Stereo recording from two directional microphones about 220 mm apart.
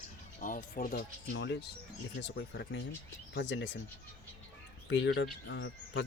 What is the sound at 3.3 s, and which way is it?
Speech, 50° left (ahead or behind).